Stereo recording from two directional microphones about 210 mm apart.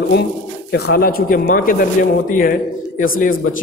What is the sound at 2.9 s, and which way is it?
Speech, 40° left (ahead or behind).